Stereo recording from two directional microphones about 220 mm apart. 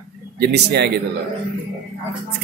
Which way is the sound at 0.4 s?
50° right (ahead or behind).